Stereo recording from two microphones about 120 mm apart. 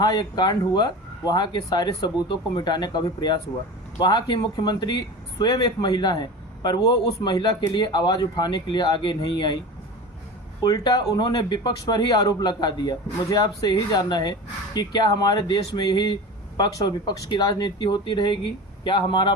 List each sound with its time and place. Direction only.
0.0 s speech: 35° left (ahead or behind)
10.6 s speech: 30° left (ahead or behind)